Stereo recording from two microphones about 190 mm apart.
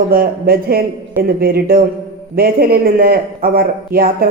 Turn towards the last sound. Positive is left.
turn(degrees=-50)  # may be behind; listen again after turning